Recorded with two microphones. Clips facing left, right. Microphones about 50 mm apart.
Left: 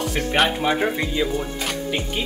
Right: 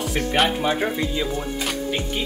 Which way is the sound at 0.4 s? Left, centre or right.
Centre.